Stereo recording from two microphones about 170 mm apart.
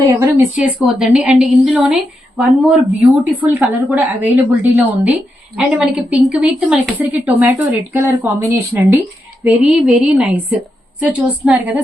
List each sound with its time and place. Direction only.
0.1 s a woman's voice: 15° right (ahead or behind)
9.4 s a woman's voice: 5° right (ahead or behind)